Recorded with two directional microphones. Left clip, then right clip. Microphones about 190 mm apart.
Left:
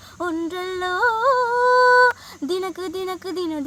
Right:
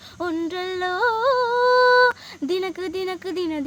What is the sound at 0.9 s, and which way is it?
Music, 25° right (ahead or behind).